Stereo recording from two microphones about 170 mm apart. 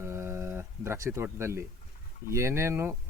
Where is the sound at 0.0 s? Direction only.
15° right (ahead or behind).